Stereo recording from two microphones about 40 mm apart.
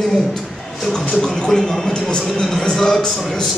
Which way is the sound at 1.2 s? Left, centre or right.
Centre.